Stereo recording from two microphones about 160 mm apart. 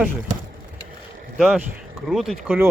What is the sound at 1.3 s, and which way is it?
Speech, centre (ahead or behind).